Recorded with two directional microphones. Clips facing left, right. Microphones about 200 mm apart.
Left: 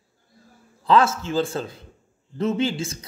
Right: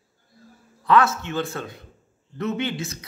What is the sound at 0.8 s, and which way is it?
A man's voice, 30° left (ahead or behind).